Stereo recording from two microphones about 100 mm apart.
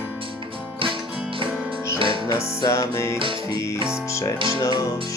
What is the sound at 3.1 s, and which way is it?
Music, 60° right (ahead or behind).